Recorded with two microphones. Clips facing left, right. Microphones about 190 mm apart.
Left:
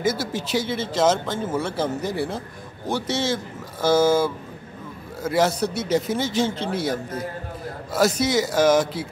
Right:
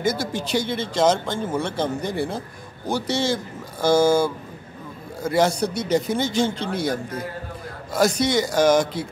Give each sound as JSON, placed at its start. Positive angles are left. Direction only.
{"t": 0.0, "sound": "speech", "side_deg": 5}